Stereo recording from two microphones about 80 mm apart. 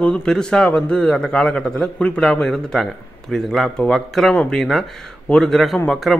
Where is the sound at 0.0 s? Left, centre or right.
Centre.